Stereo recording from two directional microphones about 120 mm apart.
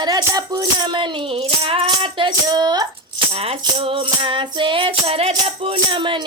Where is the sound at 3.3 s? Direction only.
50° right (ahead or behind).